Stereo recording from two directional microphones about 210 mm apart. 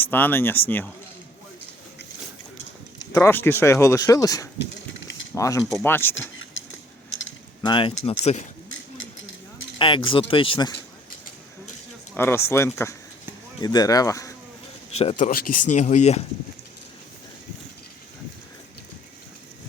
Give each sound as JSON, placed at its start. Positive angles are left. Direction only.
{"t": 0.0, "sound": "speech", "side_deg": 10}
{"t": 3.1, "sound": "speech", "side_deg": 10}
{"t": 6.3, "sound": "a sound", "side_deg": 70}
{"t": 7.6, "sound": "speech", "side_deg": 20}
{"t": 9.7, "sound": "speech", "side_deg": 25}
{"t": 12.1, "sound": "speech", "side_deg": 10}
{"t": 14.9, "sound": "speech", "side_deg": 35}